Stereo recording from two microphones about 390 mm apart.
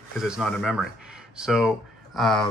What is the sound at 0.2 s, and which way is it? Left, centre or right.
Speech, centre.